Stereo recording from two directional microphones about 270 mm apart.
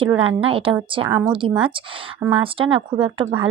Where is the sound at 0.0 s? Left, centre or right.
Centre.